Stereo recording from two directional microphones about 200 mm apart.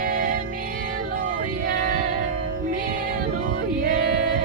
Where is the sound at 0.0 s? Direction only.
40° right (ahead or behind).